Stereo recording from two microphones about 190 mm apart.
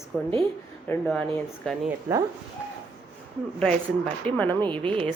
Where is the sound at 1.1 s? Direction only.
5° left (ahead or behind).